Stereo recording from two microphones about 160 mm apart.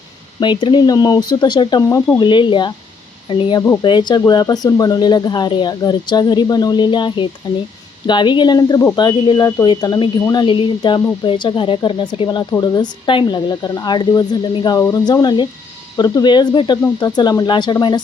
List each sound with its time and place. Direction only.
0.3 s speech: 30° left (ahead or behind)